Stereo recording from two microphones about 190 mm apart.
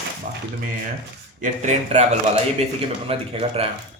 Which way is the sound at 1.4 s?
35° right (ahead or behind).